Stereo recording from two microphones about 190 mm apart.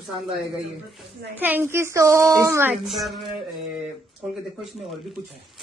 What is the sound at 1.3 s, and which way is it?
A woman's voice, 10° right (ahead or behind).